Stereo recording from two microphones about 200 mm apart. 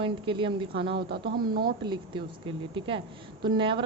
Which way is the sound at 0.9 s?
55° right (ahead or behind).